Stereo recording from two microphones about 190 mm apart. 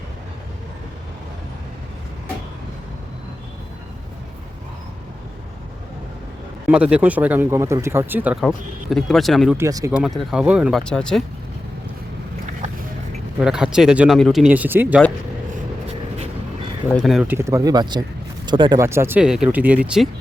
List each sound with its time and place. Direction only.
6.7 s speech: 5° right (ahead or behind)
9.6 s speech: 15° right (ahead or behind)
10.3 s speech: 5° right (ahead or behind)
13.4 s speech: 5° right (ahead or behind)
17.1 s speech: centre (ahead or behind)
17.3 s speech: 15° right (ahead or behind)
18.8 s speech: 15° right (ahead or behind)